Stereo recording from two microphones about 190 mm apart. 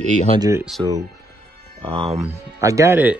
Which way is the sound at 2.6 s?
15° right (ahead or behind).